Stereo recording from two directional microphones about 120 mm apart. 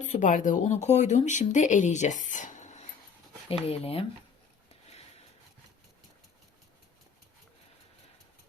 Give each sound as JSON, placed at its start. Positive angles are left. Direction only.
{"t": 0.0, "sound": "speech", "side_deg": 90}
{"t": 3.7, "sound": "speech", "side_deg": 55}
{"t": 4.7, "sound": "a sound", "side_deg": 60}